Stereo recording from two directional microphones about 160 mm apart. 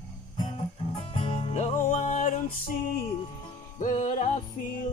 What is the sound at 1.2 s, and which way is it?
Music, 35° left (ahead or behind).